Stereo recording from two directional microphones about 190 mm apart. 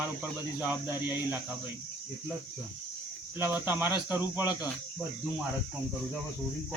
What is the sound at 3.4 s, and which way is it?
Speech, 10° right (ahead or behind).